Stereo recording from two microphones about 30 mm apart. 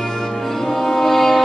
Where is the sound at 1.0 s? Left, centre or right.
Centre.